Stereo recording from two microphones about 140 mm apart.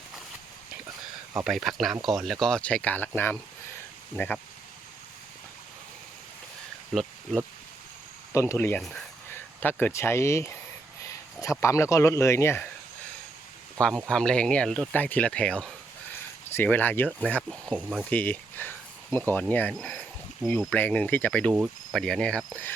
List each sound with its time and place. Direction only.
1.5 s speech: centre (ahead or behind)
6.9 s speech: centre (ahead or behind)
8.3 s speech: 20° left (ahead or behind)
8.8 s speech: centre (ahead or behind)
9.3 s speech: 15° left (ahead or behind)
11.0 s a sound: 20° left (ahead or behind)
11.6 s speech: 20° left (ahead or behind)
14.1 s speech: 5° left (ahead or behind)
17.7 s speech: 5° right (ahead or behind)
18.1 s speech: 10° left (ahead or behind)